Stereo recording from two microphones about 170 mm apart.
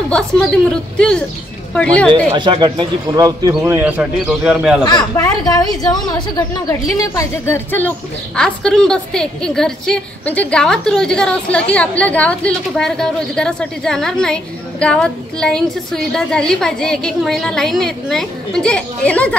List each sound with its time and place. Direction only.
0.1 s a woman's voice: 5° left (ahead or behind)
2.3 s a man's voice: 30° right (ahead or behind); by 4.8 s 5° right (ahead or behind)
4.8 s a woman's voice: 20° left (ahead or behind)